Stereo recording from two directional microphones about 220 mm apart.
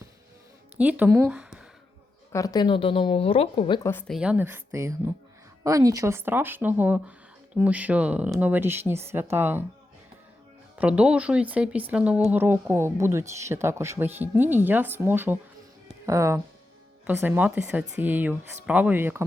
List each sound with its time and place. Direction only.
0.8 s speech: 5° right (ahead or behind)
2.3 s speech: 15° left (ahead or behind)
3.8 s speech: 5° left (ahead or behind); by 9.6 s 10° right (ahead or behind)
10.8 s speech: 5° right (ahead or behind)